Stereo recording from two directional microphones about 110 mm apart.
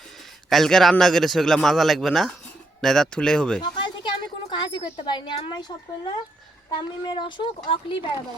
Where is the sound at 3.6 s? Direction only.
50° left (ahead or behind).